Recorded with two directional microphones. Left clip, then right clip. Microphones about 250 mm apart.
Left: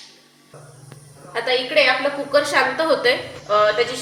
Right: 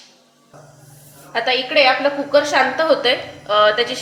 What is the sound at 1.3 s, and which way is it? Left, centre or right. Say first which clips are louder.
A woman's voice: right 2 dB; right.